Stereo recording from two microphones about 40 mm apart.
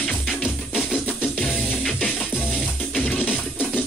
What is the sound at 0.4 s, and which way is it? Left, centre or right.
Music, left.